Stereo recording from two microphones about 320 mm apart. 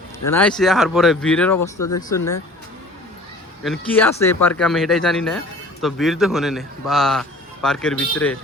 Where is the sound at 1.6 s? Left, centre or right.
Left.